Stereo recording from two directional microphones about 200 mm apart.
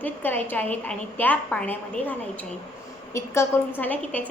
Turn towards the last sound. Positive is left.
turn(degrees=10)  # may be behind; listen again after turning